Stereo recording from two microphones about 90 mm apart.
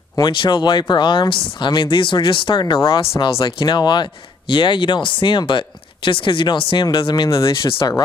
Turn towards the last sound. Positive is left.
turn(degrees=70)  # may be behind; listen again after turning